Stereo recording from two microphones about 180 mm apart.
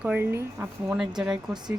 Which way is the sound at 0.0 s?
10° right (ahead or behind).